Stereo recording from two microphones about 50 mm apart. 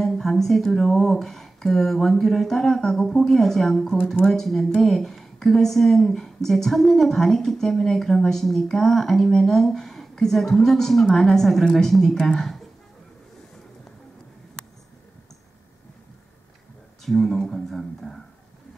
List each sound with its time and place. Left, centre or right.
0.0 s a woman's voice: centre
17.0 s speech: centre